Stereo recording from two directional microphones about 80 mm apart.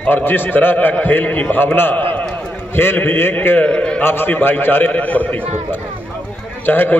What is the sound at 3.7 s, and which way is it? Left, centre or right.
Speech, centre.